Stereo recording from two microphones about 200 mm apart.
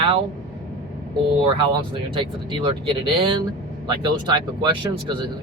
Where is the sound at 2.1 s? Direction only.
25° right (ahead or behind).